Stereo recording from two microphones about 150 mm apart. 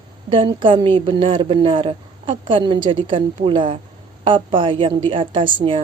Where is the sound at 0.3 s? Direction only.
35° right (ahead or behind).